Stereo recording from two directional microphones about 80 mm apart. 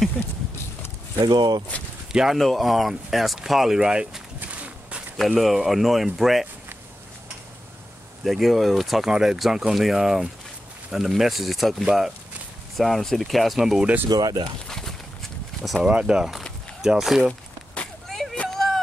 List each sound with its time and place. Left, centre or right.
1.2 s speech: right
2.1 s speech: centre
4.4 s a sound: centre
5.1 s speech: centre
8.2 s speech: centre
14.0 s speech: right
14.7 s clip-clop: centre
15.6 s speech: centre
15.9 s speech: centre
18.0 s a sound: centre